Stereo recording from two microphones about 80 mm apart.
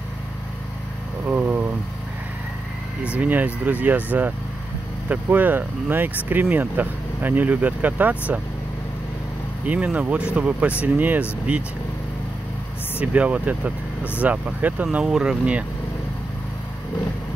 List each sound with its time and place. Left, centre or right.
1.2 s vehicle: centre
3.0 s speech: centre
9.7 s speech: centre
13.0 s speech: centre
15.0 s speech: centre